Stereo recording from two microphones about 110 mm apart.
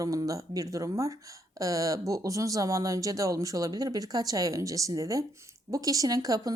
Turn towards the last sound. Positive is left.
turn(degrees=-35)  # may be behind; listen again after turning